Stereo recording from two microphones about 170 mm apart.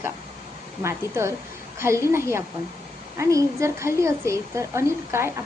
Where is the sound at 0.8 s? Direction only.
15° right (ahead or behind).